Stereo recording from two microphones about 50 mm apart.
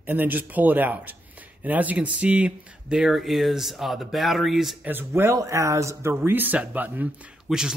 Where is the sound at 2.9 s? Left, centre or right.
Centre.